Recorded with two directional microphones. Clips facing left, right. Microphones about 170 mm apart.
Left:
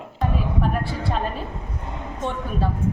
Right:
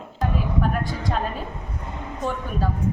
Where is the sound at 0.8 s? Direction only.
30° left (ahead or behind).